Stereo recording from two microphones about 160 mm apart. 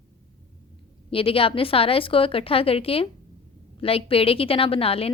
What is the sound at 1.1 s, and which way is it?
A woman's voice, 35° left (ahead or behind).